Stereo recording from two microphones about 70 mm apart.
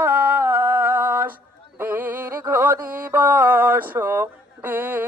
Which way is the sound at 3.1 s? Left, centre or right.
Right.